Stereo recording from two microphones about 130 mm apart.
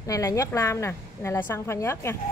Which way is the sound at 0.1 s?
25° left (ahead or behind).